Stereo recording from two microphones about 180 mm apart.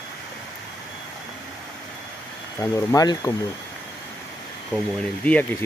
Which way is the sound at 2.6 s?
15° left (ahead or behind).